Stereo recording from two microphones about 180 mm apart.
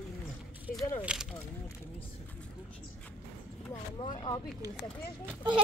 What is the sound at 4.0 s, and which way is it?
Speech, 30° left (ahead or behind).